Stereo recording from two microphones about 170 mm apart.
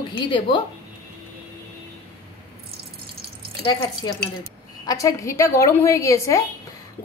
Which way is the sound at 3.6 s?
25° left (ahead or behind).